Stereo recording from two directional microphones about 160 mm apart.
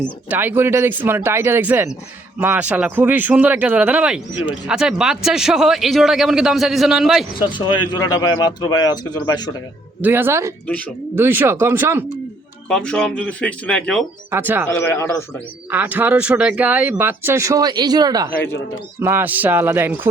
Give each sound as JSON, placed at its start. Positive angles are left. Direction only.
{"t": 0.0, "sound": "speech", "side_deg": -10}
{"t": 7.5, "sound": "speech", "side_deg": 30}
{"t": 10.0, "sound": "speech", "side_deg": -15}
{"t": 12.6, "sound": "speech", "side_deg": 5}
{"t": 14.3, "sound": "speech", "side_deg": -15}
{"t": 14.7, "sound": "speech", "side_deg": 15}
{"t": 15.7, "sound": "speech", "side_deg": -10}